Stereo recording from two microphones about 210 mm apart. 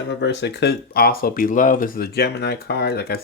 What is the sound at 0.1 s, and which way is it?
Speech, 55° left (ahead or behind).